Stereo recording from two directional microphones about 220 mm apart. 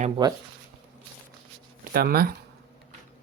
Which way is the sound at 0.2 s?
20° right (ahead or behind).